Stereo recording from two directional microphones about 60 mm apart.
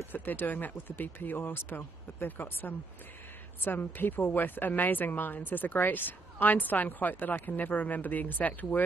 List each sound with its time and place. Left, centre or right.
0.0 s a woman's voice: left